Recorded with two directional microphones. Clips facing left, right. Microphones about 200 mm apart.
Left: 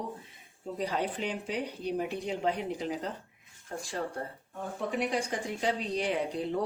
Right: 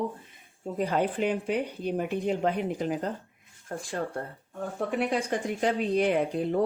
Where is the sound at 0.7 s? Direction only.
55° right (ahead or behind).